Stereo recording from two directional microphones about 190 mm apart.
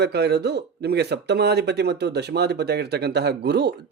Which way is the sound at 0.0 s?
60° right (ahead or behind).